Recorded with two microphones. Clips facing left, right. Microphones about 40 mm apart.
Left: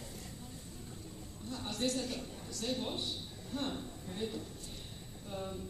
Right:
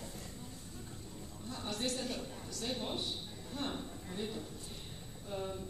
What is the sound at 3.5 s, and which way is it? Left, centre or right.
Speech, centre.